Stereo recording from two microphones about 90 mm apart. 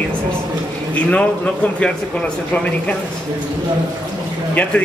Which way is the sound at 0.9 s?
15° left (ahead or behind).